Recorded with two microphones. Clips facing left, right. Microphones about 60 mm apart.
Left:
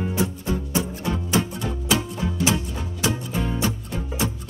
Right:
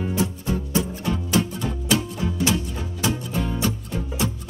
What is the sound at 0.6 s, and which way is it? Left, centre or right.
Music, centre.